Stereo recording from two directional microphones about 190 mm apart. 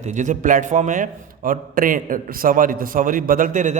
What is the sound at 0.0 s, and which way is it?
A man's voice, 40° right (ahead or behind).